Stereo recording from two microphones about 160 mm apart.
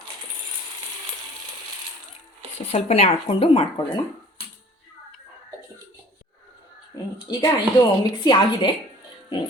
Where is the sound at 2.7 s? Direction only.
40° left (ahead or behind).